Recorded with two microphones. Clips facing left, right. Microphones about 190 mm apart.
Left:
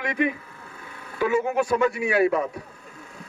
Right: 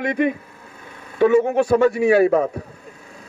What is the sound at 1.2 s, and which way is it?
A man's voice, 30° right (ahead or behind).